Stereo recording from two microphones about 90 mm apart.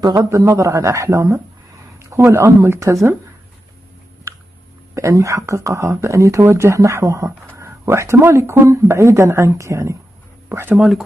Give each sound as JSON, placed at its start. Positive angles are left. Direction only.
{"t": 0.0, "sound": "speech", "side_deg": -45}
{"t": 4.3, "sound": "a sound", "side_deg": -30}
{"t": 4.9, "sound": "speech", "side_deg": -35}
{"t": 10.5, "sound": "speech", "side_deg": -20}
{"t": 10.8, "sound": "speech", "side_deg": 0}